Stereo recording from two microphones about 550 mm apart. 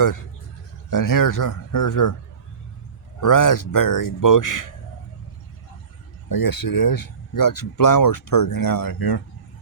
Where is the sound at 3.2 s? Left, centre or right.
Left.